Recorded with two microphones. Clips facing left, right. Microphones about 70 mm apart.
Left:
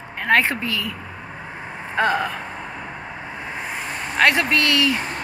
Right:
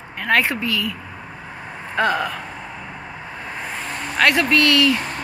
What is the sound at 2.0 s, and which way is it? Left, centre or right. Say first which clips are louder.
Speech: even; left.